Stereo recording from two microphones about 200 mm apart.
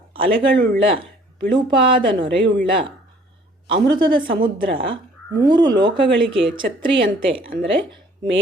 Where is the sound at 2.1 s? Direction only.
60° right (ahead or behind).